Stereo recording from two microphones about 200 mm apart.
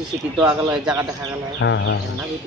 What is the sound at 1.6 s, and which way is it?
Insect, 65° left (ahead or behind).